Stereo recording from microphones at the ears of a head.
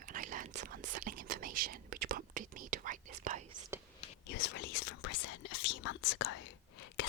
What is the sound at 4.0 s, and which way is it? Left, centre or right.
Whispering, left.